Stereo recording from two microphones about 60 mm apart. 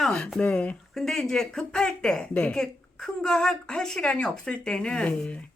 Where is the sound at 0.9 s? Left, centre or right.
Centre.